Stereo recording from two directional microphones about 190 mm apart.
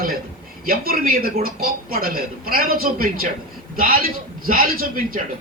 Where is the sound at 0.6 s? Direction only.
50° right (ahead or behind).